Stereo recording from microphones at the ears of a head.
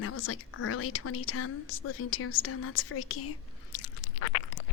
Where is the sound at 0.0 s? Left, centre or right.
Left.